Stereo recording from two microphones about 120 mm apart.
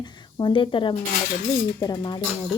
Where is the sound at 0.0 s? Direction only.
40° left (ahead or behind).